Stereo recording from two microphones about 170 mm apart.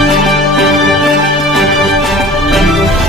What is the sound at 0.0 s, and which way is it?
Music, centre (ahead or behind).